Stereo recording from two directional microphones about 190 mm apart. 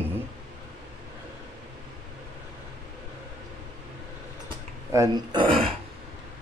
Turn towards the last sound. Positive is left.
turn(degrees=-30)  # may be behind; listen again after turning